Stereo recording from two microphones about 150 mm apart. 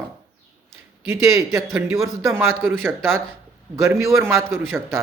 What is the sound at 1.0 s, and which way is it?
A man's voice, 20° right (ahead or behind).